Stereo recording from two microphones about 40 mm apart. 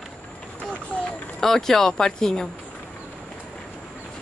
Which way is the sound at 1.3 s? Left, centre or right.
Centre.